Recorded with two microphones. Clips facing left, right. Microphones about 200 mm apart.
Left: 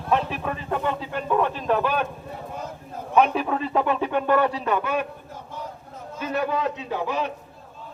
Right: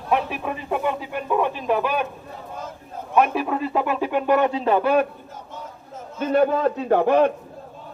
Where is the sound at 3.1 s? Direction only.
5° right (ahead or behind); by 5.1 s 35° right (ahead or behind).